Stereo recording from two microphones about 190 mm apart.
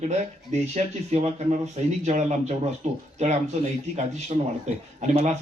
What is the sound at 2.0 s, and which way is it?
Speech, 40° right (ahead or behind).